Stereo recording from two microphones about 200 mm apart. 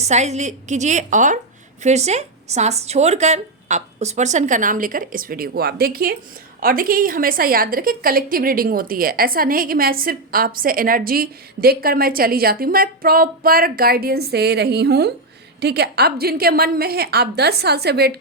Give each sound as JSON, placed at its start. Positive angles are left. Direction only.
{"t": 0.0, "sound": "a woman's voice", "side_deg": -35}